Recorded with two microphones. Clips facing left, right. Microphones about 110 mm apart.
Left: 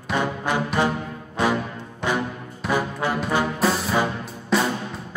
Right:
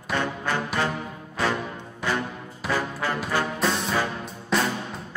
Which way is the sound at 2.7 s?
15° left (ahead or behind).